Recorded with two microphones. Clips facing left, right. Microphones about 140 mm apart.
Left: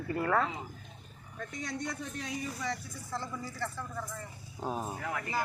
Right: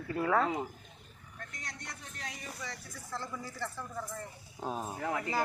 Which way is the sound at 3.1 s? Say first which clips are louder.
Left 2 dB; 5° left (ahead or behind).